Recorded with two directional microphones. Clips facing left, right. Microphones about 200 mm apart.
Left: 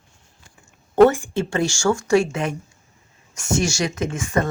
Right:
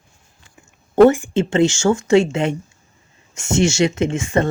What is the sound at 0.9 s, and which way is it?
Speech, 20° right (ahead or behind).